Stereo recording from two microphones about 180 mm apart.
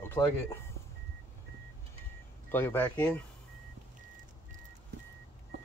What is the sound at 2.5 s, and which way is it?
Speech, 10° left (ahead or behind).